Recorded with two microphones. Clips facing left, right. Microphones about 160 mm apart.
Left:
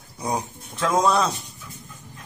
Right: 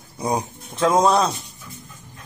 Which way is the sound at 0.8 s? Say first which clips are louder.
Right 3 dB; 25° right (ahead or behind).